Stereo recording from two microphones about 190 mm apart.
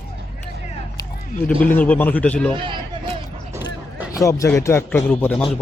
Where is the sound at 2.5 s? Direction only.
25° right (ahead or behind).